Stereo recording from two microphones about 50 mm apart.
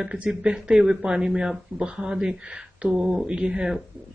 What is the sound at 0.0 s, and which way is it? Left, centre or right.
Speech, centre.